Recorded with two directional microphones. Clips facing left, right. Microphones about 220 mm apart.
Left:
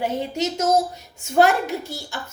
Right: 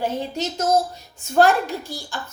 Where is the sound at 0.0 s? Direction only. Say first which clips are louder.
Left 1 dB; 20° left (ahead or behind).